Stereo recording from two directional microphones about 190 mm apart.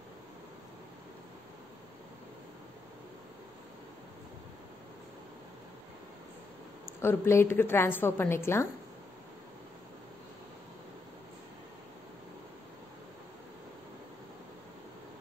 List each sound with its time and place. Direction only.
6.9 s a woman's voice: 15° left (ahead or behind)